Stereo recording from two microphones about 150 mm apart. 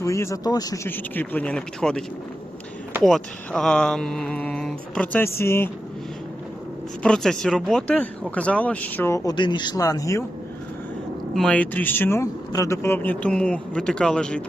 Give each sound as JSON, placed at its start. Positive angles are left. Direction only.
{"t": 0.0, "sound": "speech", "side_deg": 20}
{"t": 0.9, "sound": "speech", "side_deg": 10}
{"t": 7.0, "sound": "speech", "side_deg": 5}
{"t": 11.3, "sound": "speech", "side_deg": 5}